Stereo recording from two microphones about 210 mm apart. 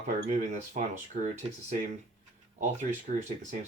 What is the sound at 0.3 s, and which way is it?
Speech, 35° right (ahead or behind).